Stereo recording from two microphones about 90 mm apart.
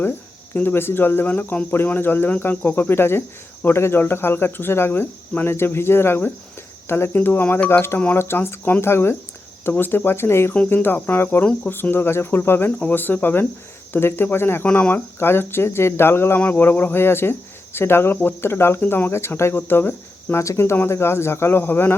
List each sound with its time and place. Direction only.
0.5 s speech: 25° left (ahead or behind)